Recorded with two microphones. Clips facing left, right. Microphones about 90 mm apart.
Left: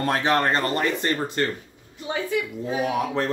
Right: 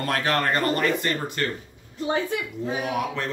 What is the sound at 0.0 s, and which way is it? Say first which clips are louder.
Speech: left 3 dB; 20° left (ahead or behind).